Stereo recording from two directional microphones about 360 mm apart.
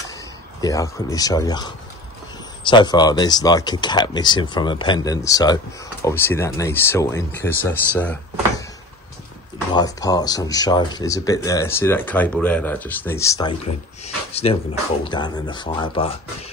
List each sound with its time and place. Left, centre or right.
0.6 s speech: centre
9.8 s speech: centre